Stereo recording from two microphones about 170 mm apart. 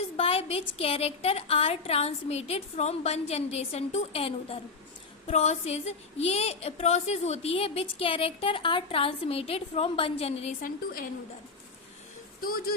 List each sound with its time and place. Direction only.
0.2 s a woman's voice: 35° left (ahead or behind)
10.6 s a woman's voice: 55° left (ahead or behind)
12.4 s a woman's voice: 60° left (ahead or behind)